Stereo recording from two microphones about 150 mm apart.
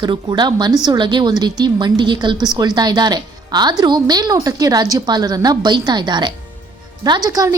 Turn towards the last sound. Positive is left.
turn(degrees=-25)  # may be behind; listen again after turning